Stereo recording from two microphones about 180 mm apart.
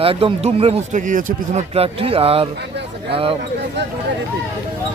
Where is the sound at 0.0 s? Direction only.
30° right (ahead or behind).